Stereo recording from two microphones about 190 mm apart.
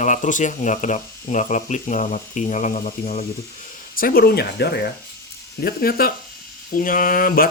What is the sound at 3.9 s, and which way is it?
Speech, 50° left (ahead or behind).